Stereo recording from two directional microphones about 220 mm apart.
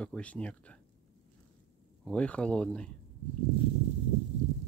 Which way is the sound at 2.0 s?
5° left (ahead or behind).